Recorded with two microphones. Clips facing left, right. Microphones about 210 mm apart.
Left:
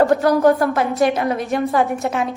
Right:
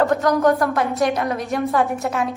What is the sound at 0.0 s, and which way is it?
Speech, 30° left (ahead or behind).